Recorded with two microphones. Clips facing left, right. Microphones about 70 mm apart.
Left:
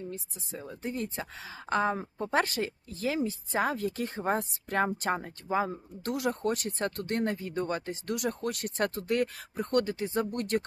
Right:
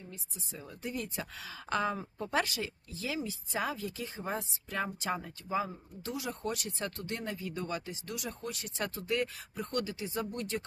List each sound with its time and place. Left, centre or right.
0.6 s a woman's voice: left